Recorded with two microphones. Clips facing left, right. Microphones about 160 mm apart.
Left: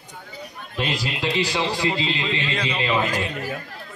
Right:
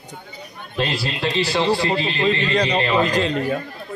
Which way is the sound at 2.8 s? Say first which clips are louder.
Right 4 dB; 15° left (ahead or behind).